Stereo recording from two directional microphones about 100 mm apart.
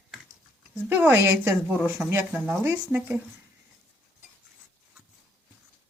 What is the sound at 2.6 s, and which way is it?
Speech, 25° right (ahead or behind).